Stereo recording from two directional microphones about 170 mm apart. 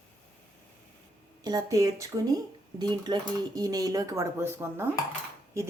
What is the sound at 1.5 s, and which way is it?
A woman's voice, 20° right (ahead or behind).